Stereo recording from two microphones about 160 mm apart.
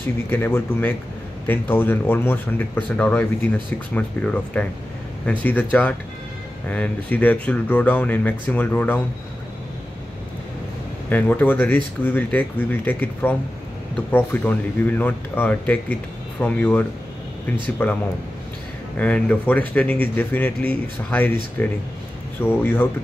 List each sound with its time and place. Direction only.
0.3 s speech: 10° left (ahead or behind)
11.1 s speech: 10° left (ahead or behind)